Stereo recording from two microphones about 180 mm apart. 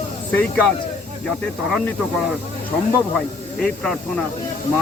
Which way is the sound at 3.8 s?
5° left (ahead or behind).